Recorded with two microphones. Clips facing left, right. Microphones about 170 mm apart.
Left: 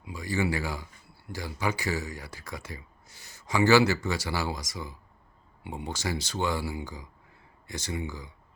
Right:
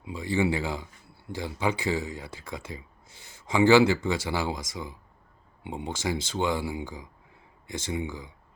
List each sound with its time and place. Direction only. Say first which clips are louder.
0.0 s speech: right 3 dB; 25° right (ahead or behind)